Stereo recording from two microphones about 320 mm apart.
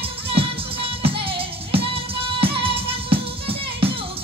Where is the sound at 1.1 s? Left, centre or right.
Centre.